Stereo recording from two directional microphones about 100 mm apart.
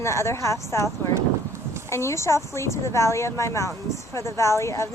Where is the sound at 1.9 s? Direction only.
30° left (ahead or behind).